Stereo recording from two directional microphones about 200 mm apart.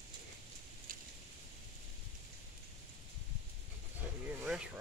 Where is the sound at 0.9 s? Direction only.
45° right (ahead or behind).